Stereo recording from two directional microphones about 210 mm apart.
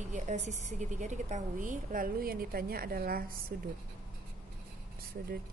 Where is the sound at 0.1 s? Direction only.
35° right (ahead or behind).